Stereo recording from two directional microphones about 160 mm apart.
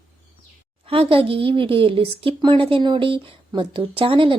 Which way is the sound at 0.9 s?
35° right (ahead or behind).